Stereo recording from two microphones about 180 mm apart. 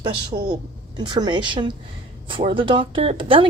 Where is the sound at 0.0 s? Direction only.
25° right (ahead or behind).